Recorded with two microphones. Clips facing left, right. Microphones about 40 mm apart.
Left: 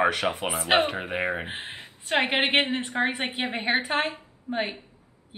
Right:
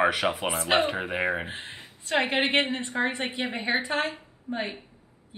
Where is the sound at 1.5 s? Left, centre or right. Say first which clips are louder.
Left 2 dB; left.